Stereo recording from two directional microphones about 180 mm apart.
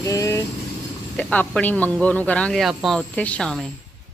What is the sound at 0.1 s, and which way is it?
Vehicle, 15° left (ahead or behind).